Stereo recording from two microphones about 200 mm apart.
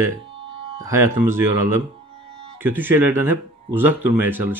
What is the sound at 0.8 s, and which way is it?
Speech, 15° right (ahead or behind).